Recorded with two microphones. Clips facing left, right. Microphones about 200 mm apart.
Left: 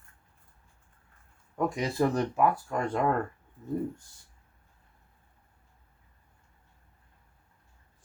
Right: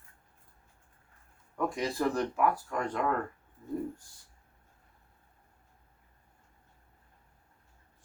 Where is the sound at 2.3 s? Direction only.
25° left (ahead or behind).